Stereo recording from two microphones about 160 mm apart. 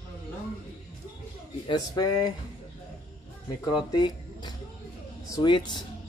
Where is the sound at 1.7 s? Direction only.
25° left (ahead or behind).